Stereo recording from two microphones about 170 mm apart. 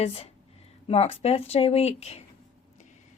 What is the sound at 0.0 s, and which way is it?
Speech, 40° left (ahead or behind).